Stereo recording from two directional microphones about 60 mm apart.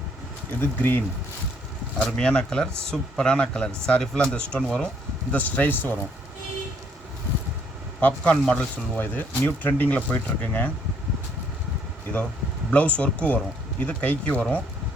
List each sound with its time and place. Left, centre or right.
0.6 s speech: left
2.0 s speech: centre
5.3 s speech: left
8.0 s speech: centre
9.0 s speech: left
12.7 s speech: left